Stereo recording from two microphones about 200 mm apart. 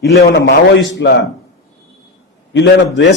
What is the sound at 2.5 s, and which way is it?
Speech, 65° left (ahead or behind).